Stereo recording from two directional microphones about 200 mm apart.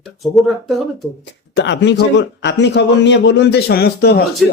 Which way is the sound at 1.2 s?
60° left (ahead or behind).